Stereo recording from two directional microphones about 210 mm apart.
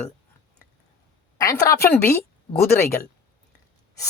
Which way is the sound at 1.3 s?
15° left (ahead or behind).